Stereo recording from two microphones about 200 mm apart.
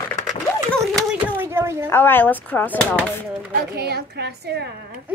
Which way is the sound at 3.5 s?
50° right (ahead or behind).